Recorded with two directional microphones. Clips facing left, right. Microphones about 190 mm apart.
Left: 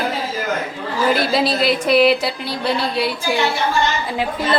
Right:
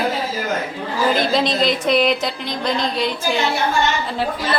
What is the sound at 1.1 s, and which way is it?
Speech, 5° left (ahead or behind).